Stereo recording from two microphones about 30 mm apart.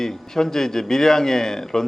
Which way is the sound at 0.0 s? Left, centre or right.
Centre.